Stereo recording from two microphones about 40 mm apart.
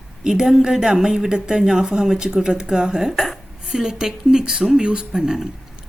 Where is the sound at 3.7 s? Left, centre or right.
Centre.